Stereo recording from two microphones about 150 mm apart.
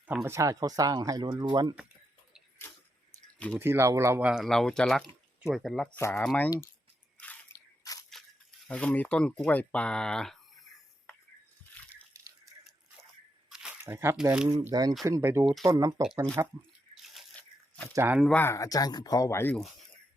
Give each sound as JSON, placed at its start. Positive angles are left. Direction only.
{"t": 0.0, "sound": "speech", "side_deg": -15}
{"t": 3.3, "sound": "speech", "side_deg": 10}
{"t": 3.6, "sound": "speech", "side_deg": -15}
{"t": 4.2, "sound": "speech", "side_deg": -5}
{"t": 6.0, "sound": "speech", "side_deg": 15}
{"t": 8.1, "sound": "a sound", "side_deg": 0}
{"t": 8.6, "sound": "speech", "side_deg": 5}
{"t": 12.1, "sound": "toothbrush", "side_deg": -20}
{"t": 13.5, "sound": "squish", "side_deg": -5}
{"t": 13.8, "sound": "speech", "side_deg": -15}
{"t": 14.7, "sound": "speech", "side_deg": -25}
{"t": 16.9, "sound": "drip", "side_deg": 0}
{"t": 17.9, "sound": "speech", "side_deg": -15}
{"t": 18.3, "sound": "speech", "side_deg": 15}